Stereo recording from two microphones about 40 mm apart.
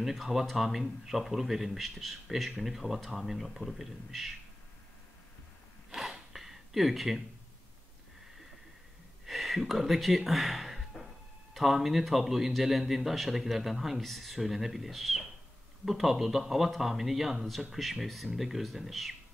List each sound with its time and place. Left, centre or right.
0.0 s speech: centre
5.9 s a sound: centre
9.2 s speech: centre